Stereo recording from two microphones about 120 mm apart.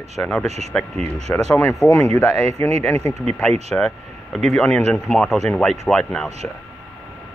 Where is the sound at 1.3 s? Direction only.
20° left (ahead or behind).